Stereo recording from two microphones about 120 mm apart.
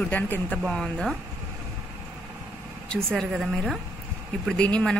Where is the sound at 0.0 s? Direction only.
10° left (ahead or behind).